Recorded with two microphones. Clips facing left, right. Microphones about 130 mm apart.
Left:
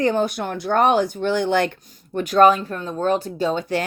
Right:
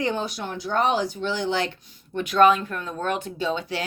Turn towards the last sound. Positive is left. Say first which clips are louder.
# left 5 dB
turn(degrees=45)  # may be behind; listen again after turning